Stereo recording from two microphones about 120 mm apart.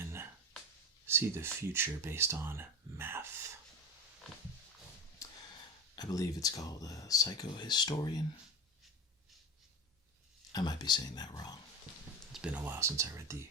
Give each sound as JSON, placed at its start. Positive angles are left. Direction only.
{"t": 1.0, "sound": "speech", "side_deg": -20}
{"t": 5.2, "sound": "a sound", "side_deg": 25}
{"t": 6.0, "sound": "speech", "side_deg": 30}
{"t": 10.5, "sound": "speech", "side_deg": 35}
{"t": 12.3, "sound": "speech", "side_deg": -10}